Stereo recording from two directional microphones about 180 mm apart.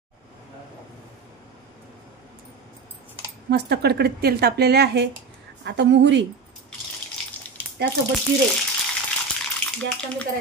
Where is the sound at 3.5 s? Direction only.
65° right (ahead or behind).